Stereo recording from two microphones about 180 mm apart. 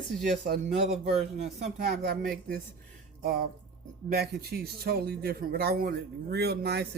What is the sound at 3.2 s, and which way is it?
Speech, 55° right (ahead or behind).